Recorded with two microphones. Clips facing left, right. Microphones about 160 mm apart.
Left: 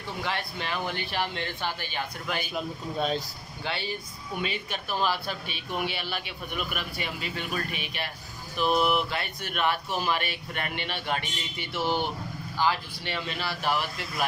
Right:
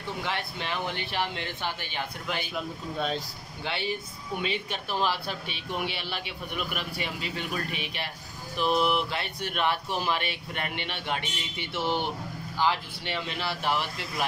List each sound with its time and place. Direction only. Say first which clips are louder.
0.2 s speech: left 3 dB; 20° right (ahead or behind)
2.5 s speech: left 1 dB; 5° left (ahead or behind)
3.6 s speech: right 1 dB; 20° right (ahead or behind)
8.6 s a sound: left 1 dB; 10° left (ahead or behind)
9.1 s speech: even; 30° right (ahead or behind)